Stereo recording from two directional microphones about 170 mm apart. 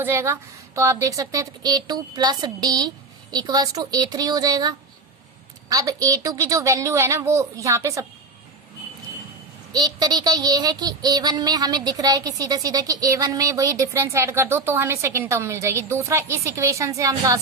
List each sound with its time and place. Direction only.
0.0 s speech: 15° right (ahead or behind)
0.8 s child singing: 20° right (ahead or behind)
9.7 s child singing: 20° right (ahead or behind)